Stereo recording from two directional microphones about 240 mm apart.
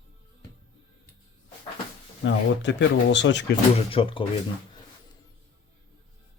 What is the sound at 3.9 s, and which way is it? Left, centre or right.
Speech, left.